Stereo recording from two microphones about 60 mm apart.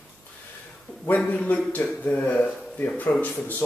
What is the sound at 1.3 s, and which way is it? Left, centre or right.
A man's voice, left.